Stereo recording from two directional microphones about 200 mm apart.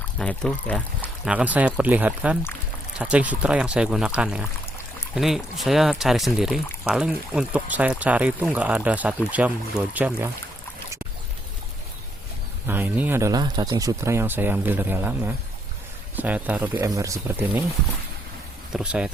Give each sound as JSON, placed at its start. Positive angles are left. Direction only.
{"t": 0.2, "sound": "speech", "side_deg": 5}
{"t": 1.3, "sound": "speech", "side_deg": -5}
{"t": 12.6, "sound": "speech", "side_deg": -10}
{"t": 18.7, "sound": "speech", "side_deg": -5}